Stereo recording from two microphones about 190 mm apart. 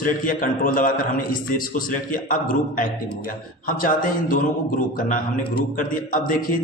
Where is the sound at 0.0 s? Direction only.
45° left (ahead or behind).